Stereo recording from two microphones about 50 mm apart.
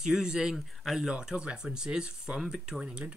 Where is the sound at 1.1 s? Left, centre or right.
Centre.